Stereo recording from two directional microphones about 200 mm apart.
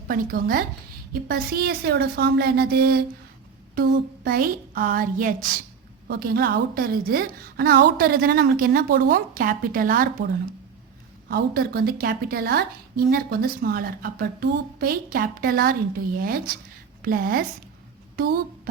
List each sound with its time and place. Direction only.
0.1 s a woman's voice: 45° right (ahead or behind)